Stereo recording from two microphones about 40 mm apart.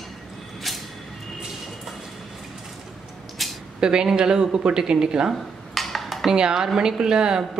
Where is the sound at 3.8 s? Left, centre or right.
Centre.